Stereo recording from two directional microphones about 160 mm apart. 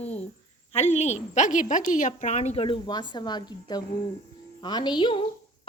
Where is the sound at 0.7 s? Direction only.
40° left (ahead or behind).